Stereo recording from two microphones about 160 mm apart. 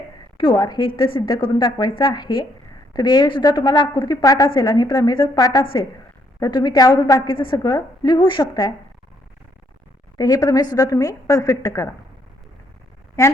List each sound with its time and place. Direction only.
0.3 s a woman's voice: 25° left (ahead or behind)
10.2 s a woman's voice: 25° left (ahead or behind)